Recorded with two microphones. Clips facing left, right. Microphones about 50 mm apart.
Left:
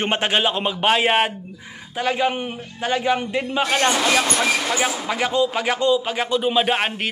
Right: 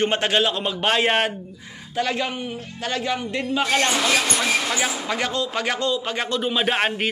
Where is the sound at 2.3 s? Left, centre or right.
Left.